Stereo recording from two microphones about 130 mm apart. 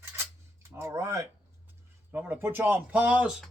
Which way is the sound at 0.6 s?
20° right (ahead or behind).